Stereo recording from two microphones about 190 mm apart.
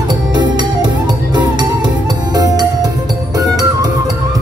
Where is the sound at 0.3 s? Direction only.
25° right (ahead or behind).